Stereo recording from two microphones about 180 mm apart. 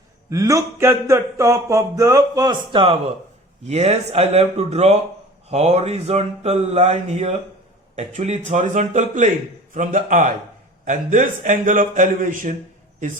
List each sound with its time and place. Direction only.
0.3 s speech: 15° right (ahead or behind)
3.7 s a man's voice: 35° right (ahead or behind)